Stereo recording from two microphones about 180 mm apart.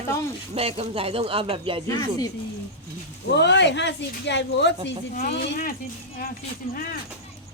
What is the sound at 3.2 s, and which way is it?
Speech, 70° left (ahead or behind).